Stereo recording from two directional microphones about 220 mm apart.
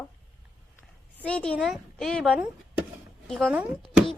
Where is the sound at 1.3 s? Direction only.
5° left (ahead or behind).